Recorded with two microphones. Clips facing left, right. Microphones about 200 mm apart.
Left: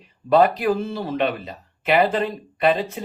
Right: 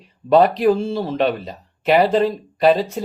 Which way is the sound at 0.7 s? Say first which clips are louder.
Right 4 dB; 30° right (ahead or behind).